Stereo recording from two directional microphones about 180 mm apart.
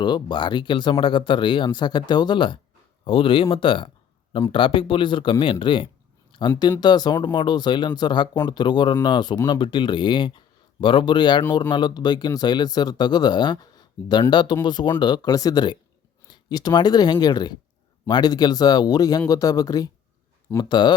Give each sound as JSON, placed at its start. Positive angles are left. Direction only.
{"t": 0.0, "sound": "speech", "side_deg": 25}